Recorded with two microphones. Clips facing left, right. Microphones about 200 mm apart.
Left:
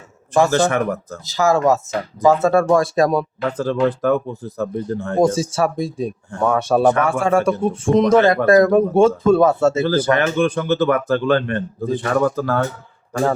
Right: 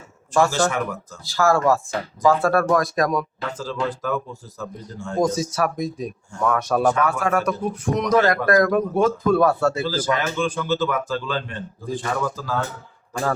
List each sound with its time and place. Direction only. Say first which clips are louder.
0.7 s speech: left 6 dB; 60° left (ahead or behind)
1.2 s speech: left 2 dB; 20° left (ahead or behind)
3.4 s speech: left 8 dB; 60° left (ahead or behind)
5.2 s speech: left 4 dB; 30° left (ahead or behind)
9.8 s speech: left 6 dB; 60° left (ahead or behind)